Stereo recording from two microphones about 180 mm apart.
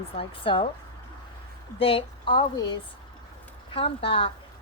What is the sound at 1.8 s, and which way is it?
Speech, 30° left (ahead or behind).